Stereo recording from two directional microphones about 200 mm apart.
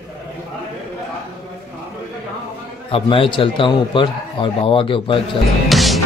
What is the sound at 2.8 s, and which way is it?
A man's voice, 25° left (ahead or behind).